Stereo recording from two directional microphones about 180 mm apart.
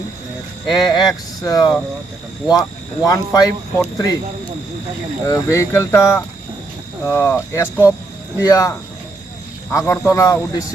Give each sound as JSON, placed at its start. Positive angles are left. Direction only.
{"t": 0.7, "sound": "speech", "side_deg": 20}
{"t": 5.2, "sound": "speech", "side_deg": 15}
{"t": 9.7, "sound": "speech", "side_deg": 15}